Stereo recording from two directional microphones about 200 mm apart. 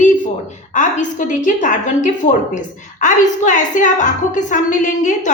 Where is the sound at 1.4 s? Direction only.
40° left (ahead or behind).